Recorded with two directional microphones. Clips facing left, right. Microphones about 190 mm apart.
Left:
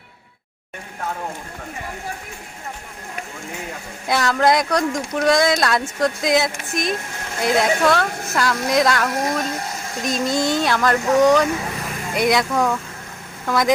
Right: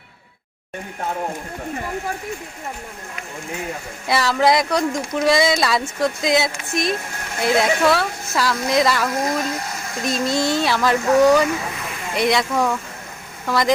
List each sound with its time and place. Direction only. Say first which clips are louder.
4.0 s speech: even; centre (ahead or behind)